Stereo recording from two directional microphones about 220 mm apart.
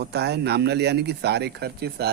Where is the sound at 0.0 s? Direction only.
50° right (ahead or behind).